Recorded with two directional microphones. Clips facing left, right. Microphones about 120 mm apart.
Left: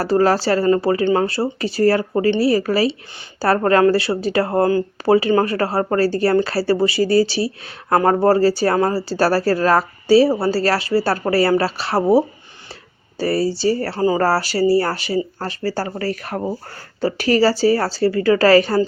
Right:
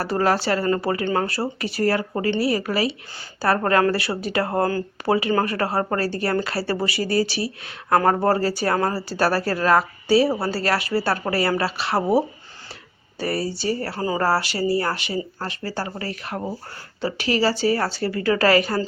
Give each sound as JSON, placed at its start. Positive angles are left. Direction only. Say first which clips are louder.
{"t": 0.0, "sound": "a woman's voice", "louder": "left 5 dB", "side_deg": 30}